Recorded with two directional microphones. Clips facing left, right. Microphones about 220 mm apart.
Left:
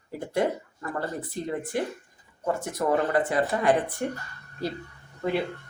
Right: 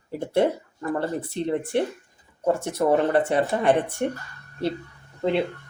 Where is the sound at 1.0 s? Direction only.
30° right (ahead or behind).